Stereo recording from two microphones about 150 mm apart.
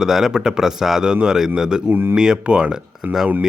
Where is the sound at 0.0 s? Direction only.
5° right (ahead or behind).